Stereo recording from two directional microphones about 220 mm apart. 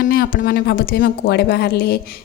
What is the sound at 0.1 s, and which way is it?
A woman's voice, 45° left (ahead or behind).